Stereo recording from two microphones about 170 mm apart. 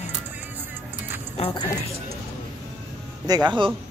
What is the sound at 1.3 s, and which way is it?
Speech, 35° left (ahead or behind).